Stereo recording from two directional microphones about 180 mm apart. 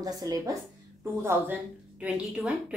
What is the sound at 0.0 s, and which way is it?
A woman's voice, 20° right (ahead or behind).